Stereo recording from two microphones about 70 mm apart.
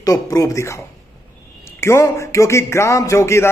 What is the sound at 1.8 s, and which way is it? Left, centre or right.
A man's voice, left.